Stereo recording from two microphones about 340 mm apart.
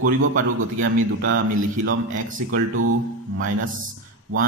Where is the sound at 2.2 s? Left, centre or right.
Right.